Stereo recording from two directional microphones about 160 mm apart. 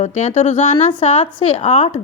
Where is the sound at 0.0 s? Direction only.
45° left (ahead or behind).